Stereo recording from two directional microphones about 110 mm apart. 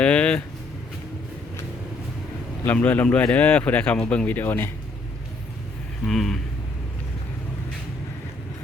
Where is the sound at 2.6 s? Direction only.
15° left (ahead or behind).